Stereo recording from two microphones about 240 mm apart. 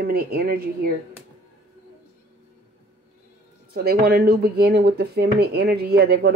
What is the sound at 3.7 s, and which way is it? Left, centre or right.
Speech, right.